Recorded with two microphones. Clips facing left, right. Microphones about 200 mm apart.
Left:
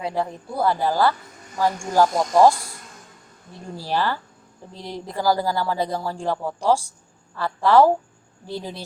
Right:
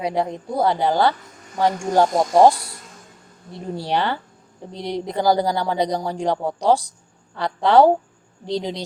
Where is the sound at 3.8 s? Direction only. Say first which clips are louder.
Right 1 dB; 20° right (ahead or behind).